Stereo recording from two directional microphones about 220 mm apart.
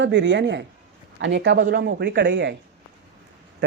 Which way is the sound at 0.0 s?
55° right (ahead or behind).